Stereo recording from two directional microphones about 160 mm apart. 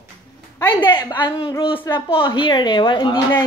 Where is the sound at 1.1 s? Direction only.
30° left (ahead or behind).